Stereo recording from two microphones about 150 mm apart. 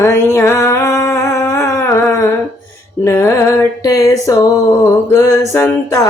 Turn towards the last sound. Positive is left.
turn(degrees=20)  # may be behind; listen again after turning